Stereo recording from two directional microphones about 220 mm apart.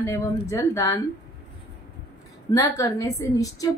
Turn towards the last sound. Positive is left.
turn(degrees=15)  # may be behind; listen again after turning